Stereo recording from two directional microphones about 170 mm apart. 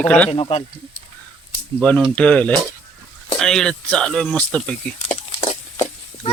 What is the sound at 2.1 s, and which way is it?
Speech, 10° left (ahead or behind).